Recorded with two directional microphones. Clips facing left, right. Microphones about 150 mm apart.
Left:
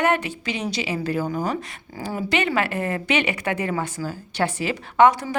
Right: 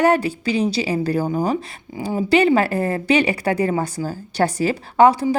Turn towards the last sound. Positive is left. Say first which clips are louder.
# right 2 dB
turn(degrees=-30)  # may be behind; listen again after turning